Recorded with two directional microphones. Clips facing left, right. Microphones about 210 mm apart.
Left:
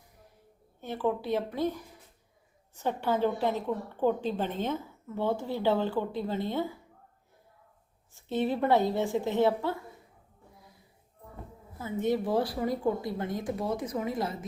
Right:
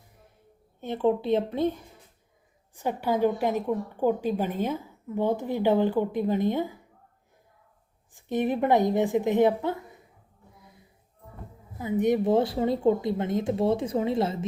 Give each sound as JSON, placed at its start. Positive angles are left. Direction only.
{"t": 0.8, "sound": "a woman's voice", "side_deg": -20}
{"t": 2.7, "sound": "a woman's voice", "side_deg": -10}
{"t": 8.1, "sound": "a woman's voice", "side_deg": -15}
{"t": 11.8, "sound": "a woman's voice", "side_deg": -15}